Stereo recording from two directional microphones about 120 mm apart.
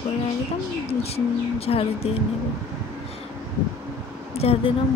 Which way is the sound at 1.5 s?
55° left (ahead or behind).